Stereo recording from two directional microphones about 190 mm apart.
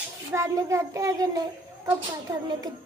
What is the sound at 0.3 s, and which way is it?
A child's voice, 15° right (ahead or behind).